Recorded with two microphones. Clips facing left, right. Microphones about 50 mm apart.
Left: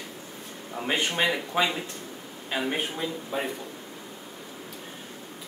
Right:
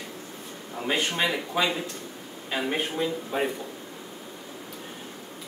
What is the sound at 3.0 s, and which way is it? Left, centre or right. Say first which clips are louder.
Speech: right 3 dB; centre.